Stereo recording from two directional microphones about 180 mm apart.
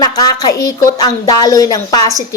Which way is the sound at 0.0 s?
20° left (ahead or behind).